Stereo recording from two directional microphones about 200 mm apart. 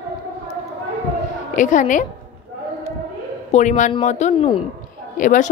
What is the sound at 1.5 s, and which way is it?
Speech, 40° left (ahead or behind).